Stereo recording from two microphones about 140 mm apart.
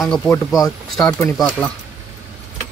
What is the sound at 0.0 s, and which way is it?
Speech, 5° left (ahead or behind).